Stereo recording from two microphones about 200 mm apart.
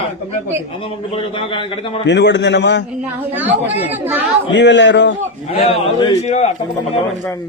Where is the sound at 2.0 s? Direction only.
60° left (ahead or behind).